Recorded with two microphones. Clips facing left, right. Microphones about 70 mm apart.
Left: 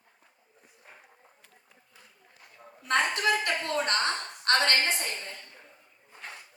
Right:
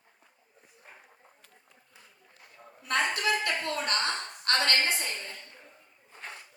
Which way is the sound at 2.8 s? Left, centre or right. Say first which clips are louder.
Left 2 dB; left.